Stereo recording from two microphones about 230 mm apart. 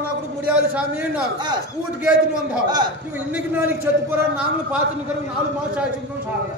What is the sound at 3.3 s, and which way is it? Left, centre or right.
A man's voice, centre.